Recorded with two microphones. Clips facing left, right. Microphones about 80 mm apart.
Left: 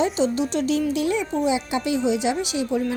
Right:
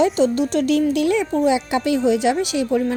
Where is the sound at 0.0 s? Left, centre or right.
Right.